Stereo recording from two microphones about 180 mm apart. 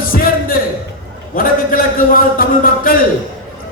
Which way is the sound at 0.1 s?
50° left (ahead or behind).